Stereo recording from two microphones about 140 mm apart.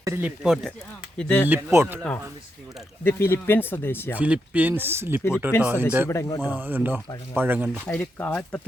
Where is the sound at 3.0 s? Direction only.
15° left (ahead or behind).